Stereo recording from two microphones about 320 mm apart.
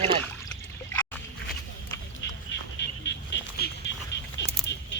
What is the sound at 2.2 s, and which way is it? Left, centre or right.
Music, left.